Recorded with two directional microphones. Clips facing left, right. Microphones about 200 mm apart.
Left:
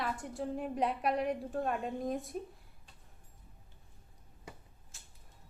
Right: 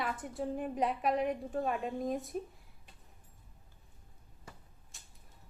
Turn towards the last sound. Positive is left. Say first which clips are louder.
# even
turn(degrees=0)  # may be behind; listen again after turning